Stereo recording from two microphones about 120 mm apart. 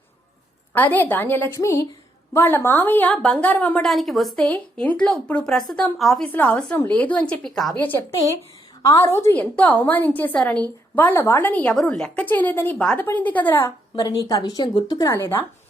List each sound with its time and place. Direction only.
0.7 s speech: 15° left (ahead or behind)
3.8 s a woman's voice: centre (ahead or behind)
4.4 s speech: 10° left (ahead or behind)
6.3 s speech: 15° left (ahead or behind)
8.8 s a woman's voice: 25° left (ahead or behind)
9.3 s a woman's voice: 10° left (ahead or behind)
11.7 s speech: 5° left (ahead or behind)
14.0 s a woman's voice: 30° left (ahead or behind)